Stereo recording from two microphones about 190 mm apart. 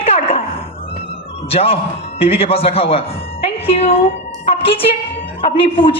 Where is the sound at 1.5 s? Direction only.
30° left (ahead or behind).